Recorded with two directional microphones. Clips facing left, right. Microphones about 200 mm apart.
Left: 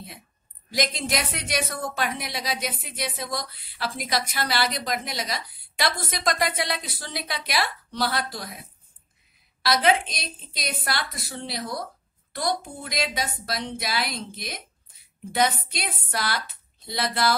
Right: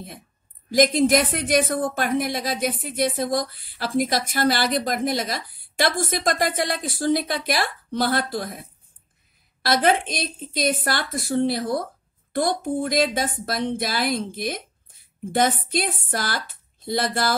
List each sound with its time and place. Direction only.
0.7 s speech: 50° right (ahead or behind)